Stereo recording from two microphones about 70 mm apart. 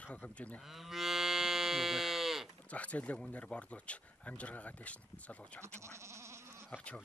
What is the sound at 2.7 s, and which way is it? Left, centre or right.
Speech, centre.